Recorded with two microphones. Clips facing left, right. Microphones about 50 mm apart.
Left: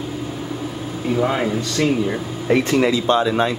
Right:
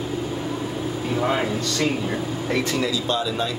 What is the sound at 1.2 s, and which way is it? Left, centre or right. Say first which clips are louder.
Speech: left 3 dB; centre.